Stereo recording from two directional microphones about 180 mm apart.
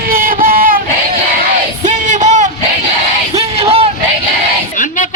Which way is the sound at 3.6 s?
35° right (ahead or behind).